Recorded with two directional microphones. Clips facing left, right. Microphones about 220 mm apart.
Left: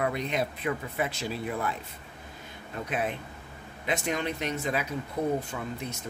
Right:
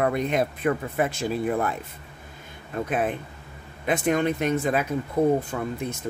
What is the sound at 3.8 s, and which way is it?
Speech, 50° right (ahead or behind).